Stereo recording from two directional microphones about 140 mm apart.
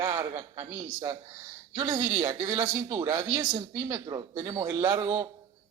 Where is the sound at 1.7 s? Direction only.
25° right (ahead or behind).